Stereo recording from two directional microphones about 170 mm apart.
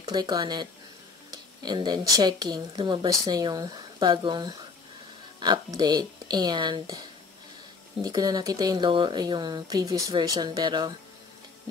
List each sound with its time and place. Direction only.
0.0 s speech: 25° right (ahead or behind)